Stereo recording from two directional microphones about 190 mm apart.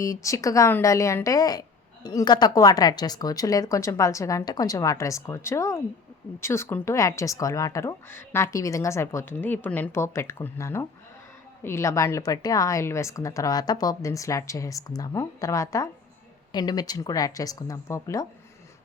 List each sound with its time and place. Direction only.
0.0 s speech: 15° left (ahead or behind)